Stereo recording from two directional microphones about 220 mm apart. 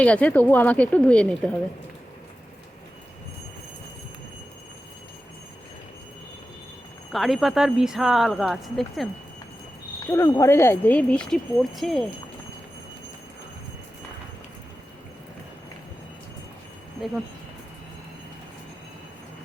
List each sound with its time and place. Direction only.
0.0 s speech: 5° left (ahead or behind)
7.1 s speech: centre (ahead or behind)
10.1 s speech: 15° left (ahead or behind)